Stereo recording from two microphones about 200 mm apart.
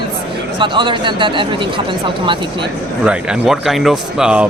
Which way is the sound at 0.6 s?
25° right (ahead or behind).